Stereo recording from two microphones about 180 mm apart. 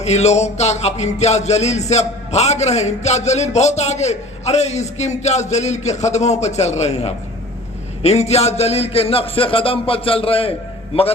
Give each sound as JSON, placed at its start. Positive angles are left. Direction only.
{"t": 0.0, "sound": "music", "side_deg": 40}